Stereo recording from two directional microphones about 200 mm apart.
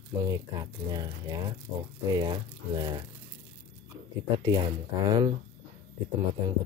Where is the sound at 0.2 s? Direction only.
20° right (ahead or behind).